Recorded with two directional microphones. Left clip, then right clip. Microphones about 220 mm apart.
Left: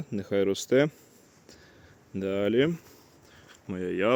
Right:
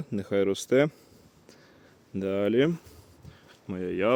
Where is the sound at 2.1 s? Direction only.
10° right (ahead or behind).